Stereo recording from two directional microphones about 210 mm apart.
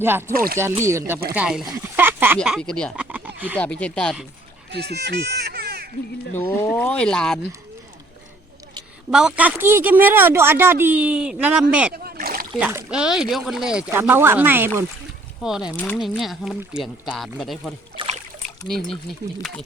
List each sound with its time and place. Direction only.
0.0 s speech: 10° right (ahead or behind)
0.3 s speech: 45° right (ahead or behind)
0.6 s speech: 15° right (ahead or behind)
2.0 s a sound: 10° right (ahead or behind)
3.6 s speech: 5° left (ahead or behind)
4.7 s speech: 50° right (ahead or behind)
6.4 s speech: 10° left (ahead or behind)
9.0 s speech: 5° right (ahead or behind)
11.9 s splash: 45° right (ahead or behind)
12.5 s speech: 5° right (ahead or behind)
17.9 s splash: 25° right (ahead or behind)